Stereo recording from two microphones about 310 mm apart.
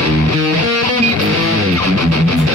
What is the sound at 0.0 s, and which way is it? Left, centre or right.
Music, right.